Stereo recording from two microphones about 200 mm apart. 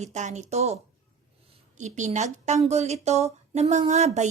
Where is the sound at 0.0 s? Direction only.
35° right (ahead or behind).